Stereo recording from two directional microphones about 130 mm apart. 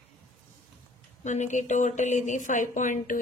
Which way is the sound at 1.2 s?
65° left (ahead or behind).